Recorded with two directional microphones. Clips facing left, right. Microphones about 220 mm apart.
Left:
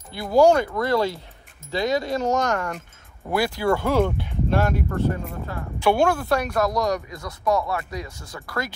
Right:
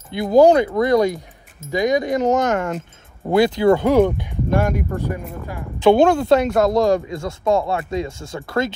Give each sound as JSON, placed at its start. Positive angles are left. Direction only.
{"t": 0.1, "sound": "speech", "side_deg": -20}